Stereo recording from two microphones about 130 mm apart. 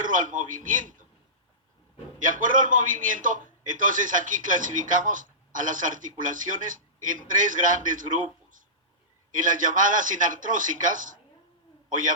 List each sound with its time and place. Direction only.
0.0 s a man's voice: 90° right
2.2 s a man's voice: 90° right